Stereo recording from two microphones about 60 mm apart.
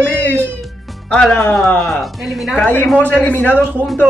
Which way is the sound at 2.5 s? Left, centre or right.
Left.